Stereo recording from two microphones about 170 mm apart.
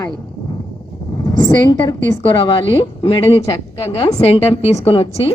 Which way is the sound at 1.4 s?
20° left (ahead or behind).